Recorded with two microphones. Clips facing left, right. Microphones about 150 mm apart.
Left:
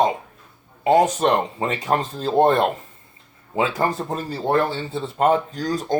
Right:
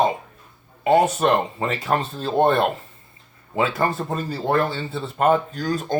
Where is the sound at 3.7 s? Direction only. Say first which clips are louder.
Even; 30° left (ahead or behind).